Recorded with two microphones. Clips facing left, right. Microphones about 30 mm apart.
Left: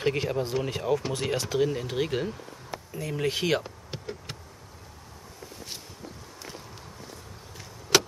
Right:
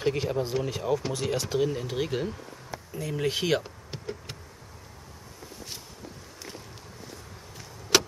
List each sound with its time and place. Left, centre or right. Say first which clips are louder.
0.0 s speech: even; centre
7.9 s vehicle: left 1 dB; centre